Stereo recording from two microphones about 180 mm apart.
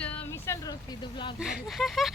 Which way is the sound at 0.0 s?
10° left (ahead or behind).